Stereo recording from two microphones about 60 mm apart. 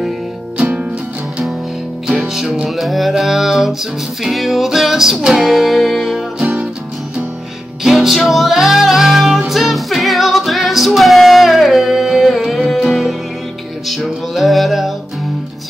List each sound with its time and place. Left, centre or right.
0.6 s music: right
2.2 s music: centre
6.4 s music: right
7.8 s music: centre